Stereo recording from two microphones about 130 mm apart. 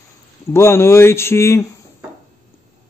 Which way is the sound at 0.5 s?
20° left (ahead or behind).